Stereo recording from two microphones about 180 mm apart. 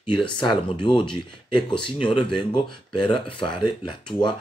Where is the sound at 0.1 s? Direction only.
25° left (ahead or behind).